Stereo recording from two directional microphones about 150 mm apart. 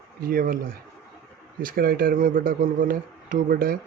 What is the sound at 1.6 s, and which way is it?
Speech, 75° right (ahead or behind).